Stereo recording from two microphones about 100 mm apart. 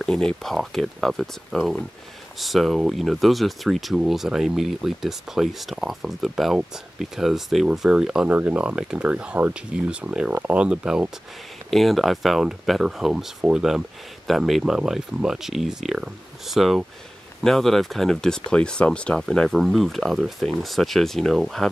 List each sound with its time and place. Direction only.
0.0 s speech: 5° left (ahead or behind)
8.3 s speech: 15° right (ahead or behind); by 21.6 s centre (ahead or behind)